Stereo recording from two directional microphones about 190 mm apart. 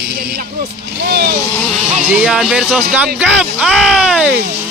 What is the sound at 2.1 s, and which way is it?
Speech, 5° right (ahead or behind).